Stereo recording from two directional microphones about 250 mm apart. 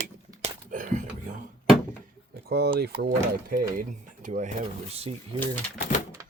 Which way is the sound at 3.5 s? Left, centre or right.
Right.